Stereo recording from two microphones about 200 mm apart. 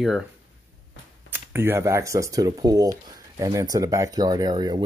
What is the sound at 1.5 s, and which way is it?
Speech, 10° right (ahead or behind).